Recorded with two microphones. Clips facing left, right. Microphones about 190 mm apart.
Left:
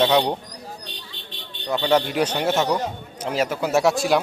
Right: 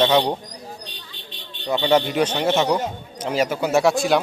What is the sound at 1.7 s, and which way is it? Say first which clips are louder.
Speech: right 1 dB; centre (ahead or behind).